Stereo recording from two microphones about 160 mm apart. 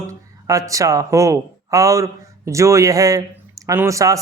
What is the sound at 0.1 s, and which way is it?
Speech, 20° right (ahead or behind).